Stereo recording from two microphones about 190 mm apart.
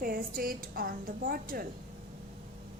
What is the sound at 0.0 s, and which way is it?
A woman's voice, 50° right (ahead or behind).